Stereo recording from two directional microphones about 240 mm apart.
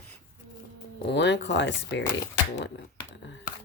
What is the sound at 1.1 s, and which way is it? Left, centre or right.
Speech, left.